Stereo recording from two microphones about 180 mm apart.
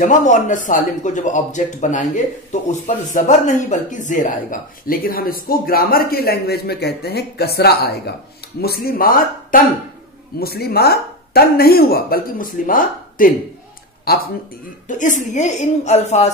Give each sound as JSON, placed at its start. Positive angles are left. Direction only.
{"t": 0.0, "sound": "a woman's voice", "side_deg": 45}
{"t": 14.9, "sound": "a woman's voice", "side_deg": 45}